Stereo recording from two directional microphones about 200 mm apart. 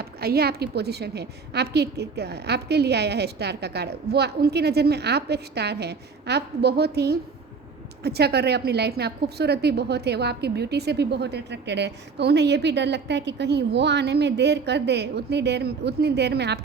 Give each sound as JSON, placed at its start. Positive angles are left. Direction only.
{"t": 0.0, "sound": "a woman's voice", "side_deg": -50}